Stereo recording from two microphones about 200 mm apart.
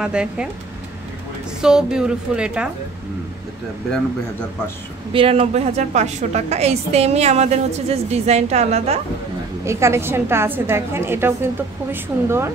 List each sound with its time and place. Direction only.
0.0 s a woman's voice: 5° right (ahead or behind)
1.6 s a woman's voice: 5° right (ahead or behind)
5.1 s a woman's voice: 30° right (ahead or behind)
9.7 s a woman's voice: 15° right (ahead or behind)